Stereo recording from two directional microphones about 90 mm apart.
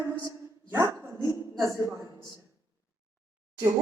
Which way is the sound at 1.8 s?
35° right (ahead or behind).